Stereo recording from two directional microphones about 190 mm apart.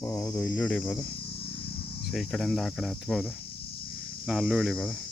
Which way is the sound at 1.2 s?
55° left (ahead or behind).